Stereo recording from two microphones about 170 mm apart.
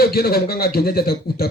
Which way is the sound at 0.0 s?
65° left (ahead or behind).